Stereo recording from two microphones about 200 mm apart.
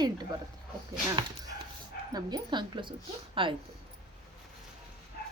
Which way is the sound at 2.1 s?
20° right (ahead or behind).